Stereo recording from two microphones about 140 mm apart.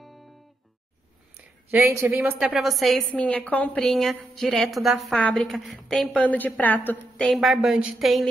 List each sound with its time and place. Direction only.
1.7 s a woman's voice: 15° right (ahead or behind); by 8.3 s centre (ahead or behind)